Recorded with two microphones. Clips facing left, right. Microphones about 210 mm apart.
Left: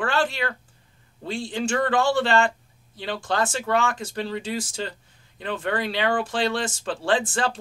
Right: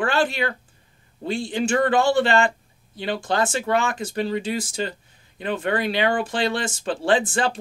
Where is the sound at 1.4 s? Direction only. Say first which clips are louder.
Right 3 dB; 15° right (ahead or behind).